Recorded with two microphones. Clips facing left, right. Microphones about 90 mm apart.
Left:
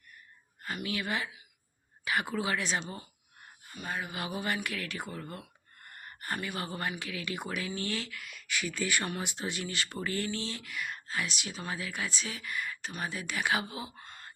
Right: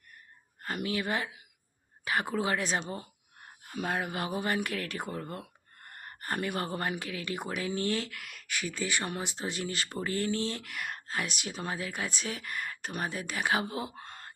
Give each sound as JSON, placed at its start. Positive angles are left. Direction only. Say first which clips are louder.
{"t": 0.6, "sound": "speech", "louder": "right 3 dB", "side_deg": -45}
{"t": 3.6, "sound": "speech", "louder": "right 5 dB", "side_deg": -70}
{"t": 4.1, "sound": "speech", "louder": "right 3 dB", "side_deg": -40}
{"t": 8.1, "sound": "speech", "louder": "left 1 dB", "side_deg": -60}
{"t": 8.6, "sound": "speech", "louder": "even", "side_deg": -25}
{"t": 13.9, "sound": "a sound", "louder": "right 3 dB", "side_deg": -55}